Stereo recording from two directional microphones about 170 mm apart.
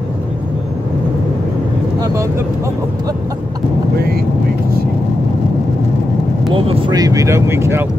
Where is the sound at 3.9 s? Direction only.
65° right (ahead or behind).